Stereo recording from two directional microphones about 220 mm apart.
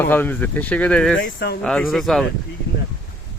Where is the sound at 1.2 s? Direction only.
45° left (ahead or behind).